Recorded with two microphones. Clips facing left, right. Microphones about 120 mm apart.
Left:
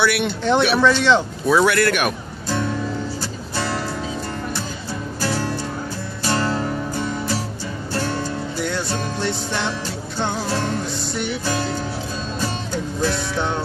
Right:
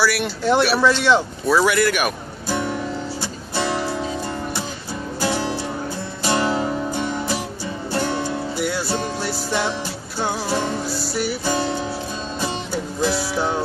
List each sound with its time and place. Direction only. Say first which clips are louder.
0.0 s speech: left 1 dB; centre (ahead or behind)
3.2 s music: right 1 dB; 15° right (ahead or behind)
5.2 s music: right 1 dB; 15° right (ahead or behind)